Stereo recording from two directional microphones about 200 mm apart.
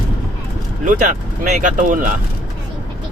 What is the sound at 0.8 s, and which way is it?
Speech, 40° right (ahead or behind).